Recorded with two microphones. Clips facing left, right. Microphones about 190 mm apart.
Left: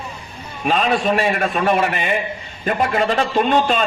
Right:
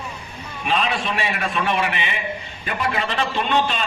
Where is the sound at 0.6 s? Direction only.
45° left (ahead or behind).